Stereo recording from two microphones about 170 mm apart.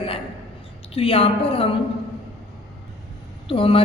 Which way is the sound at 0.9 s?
35° left (ahead or behind).